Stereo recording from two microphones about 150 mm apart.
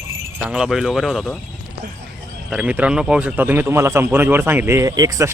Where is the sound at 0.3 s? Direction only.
10° right (ahead or behind).